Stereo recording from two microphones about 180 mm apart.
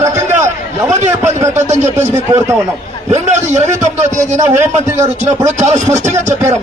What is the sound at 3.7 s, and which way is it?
Speech, 15° right (ahead or behind).